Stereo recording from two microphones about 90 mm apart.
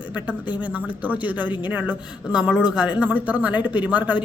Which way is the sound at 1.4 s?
60° left (ahead or behind).